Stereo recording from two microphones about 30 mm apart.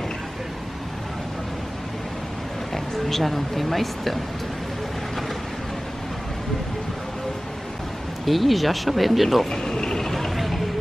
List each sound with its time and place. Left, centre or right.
2.7 s speech: centre
8.3 s speech: centre
9.5 s vehicle: left
10.3 s vehicle: centre